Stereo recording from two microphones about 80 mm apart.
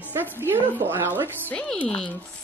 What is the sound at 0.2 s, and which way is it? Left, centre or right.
A woman's voice, right.